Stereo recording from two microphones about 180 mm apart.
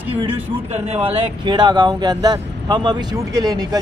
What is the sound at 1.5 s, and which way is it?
Speech, 25° right (ahead or behind).